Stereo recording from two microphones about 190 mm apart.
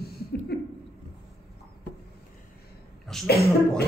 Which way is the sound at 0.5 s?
60° left (ahead or behind).